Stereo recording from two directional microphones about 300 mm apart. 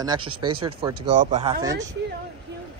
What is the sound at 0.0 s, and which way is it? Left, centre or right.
Speech, centre.